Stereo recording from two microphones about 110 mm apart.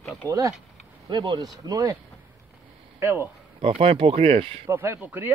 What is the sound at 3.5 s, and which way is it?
Speech, 60° right (ahead or behind).